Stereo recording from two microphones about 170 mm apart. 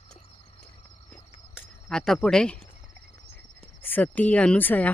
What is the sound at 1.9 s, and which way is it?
Speech, 5° left (ahead or behind).